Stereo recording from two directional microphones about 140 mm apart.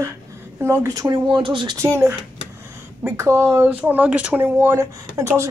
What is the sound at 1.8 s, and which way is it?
Speech, 20° right (ahead or behind).